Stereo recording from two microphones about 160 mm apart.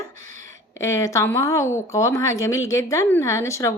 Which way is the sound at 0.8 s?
20° left (ahead or behind).